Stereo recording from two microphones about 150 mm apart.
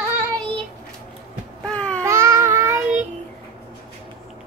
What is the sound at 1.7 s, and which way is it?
Baby cry, 10° left (ahead or behind).